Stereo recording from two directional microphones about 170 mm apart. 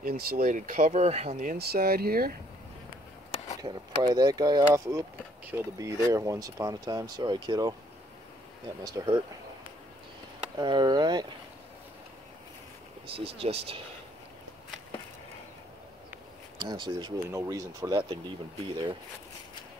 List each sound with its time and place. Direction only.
0.0 s speech: 60° right (ahead or behind)
3.6 s speech: 25° right (ahead or behind)
8.8 s speech: 20° right (ahead or behind)
10.6 s speech: 25° right (ahead or behind)
13.0 s speech: 35° right (ahead or behind)
16.6 s speech: 25° right (ahead or behind)